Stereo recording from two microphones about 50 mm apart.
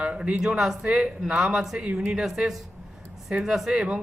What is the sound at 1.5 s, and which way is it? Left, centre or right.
A woman's voice, centre.